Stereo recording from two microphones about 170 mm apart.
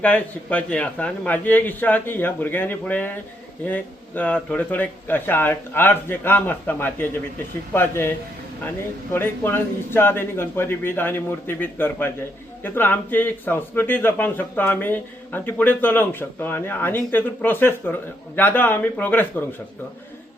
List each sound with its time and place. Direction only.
0.0 s a man's voice: 10° left (ahead or behind)
9.1 s a man's voice: 15° left (ahead or behind)